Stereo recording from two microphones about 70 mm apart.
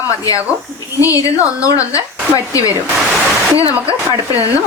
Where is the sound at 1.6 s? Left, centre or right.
Left.